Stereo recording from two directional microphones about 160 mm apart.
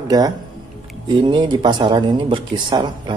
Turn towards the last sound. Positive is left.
turn(degrees=-30)  # may be behind; listen again after turning